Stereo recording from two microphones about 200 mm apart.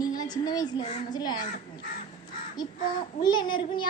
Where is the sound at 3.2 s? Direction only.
20° left (ahead or behind).